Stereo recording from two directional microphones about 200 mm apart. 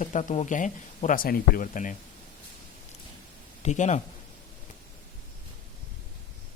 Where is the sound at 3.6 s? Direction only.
35° left (ahead or behind).